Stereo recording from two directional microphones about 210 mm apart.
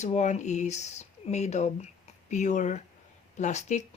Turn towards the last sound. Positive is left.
turn(degrees=35)  # may be behind; listen again after turning